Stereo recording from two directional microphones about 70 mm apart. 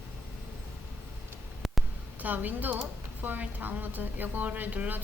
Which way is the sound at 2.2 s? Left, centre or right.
Right.